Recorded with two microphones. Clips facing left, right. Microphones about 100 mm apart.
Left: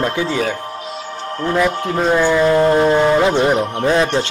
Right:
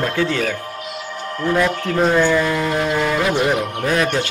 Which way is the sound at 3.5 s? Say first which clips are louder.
Left 4 dB; 30° left (ahead or behind).